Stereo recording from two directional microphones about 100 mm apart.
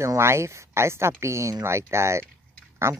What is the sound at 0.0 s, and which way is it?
Speech, 30° right (ahead or behind).